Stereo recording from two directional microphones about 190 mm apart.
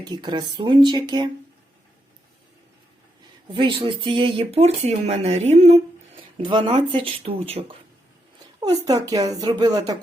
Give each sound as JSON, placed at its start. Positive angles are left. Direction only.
{"t": 0.0, "sound": "speech", "side_deg": -20}
{"t": 3.5, "sound": "speech", "side_deg": -25}
{"t": 8.9, "sound": "speech", "side_deg": -20}